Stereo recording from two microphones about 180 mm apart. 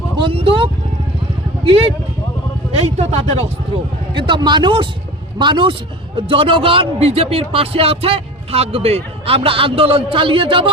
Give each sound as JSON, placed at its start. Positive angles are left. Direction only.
{"t": 0.3, "sound": "speech", "side_deg": -30}